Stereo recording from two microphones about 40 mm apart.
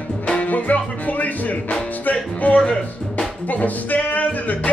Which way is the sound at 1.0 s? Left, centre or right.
Left.